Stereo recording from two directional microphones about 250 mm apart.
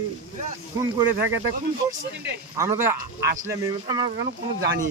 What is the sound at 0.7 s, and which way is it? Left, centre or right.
Speech, centre.